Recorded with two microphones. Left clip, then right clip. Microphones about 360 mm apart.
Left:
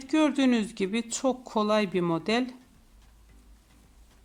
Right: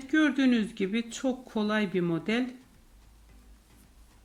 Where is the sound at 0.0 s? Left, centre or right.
Centre.